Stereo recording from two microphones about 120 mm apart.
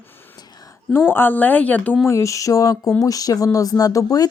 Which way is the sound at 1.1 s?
15° left (ahead or behind).